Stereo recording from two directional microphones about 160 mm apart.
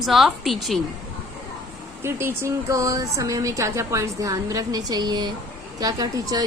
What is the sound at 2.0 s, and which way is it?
Speech, 15° right (ahead or behind).